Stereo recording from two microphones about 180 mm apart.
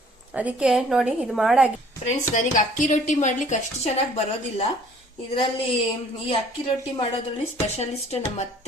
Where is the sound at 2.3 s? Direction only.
45° left (ahead or behind).